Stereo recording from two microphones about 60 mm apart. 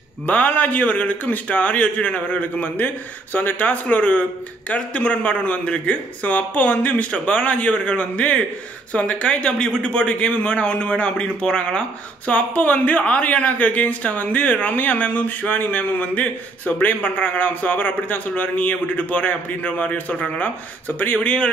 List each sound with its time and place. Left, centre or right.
0.3 s a man's voice: left
12.3 s a man's voice: left
21.2 s a man's voice: left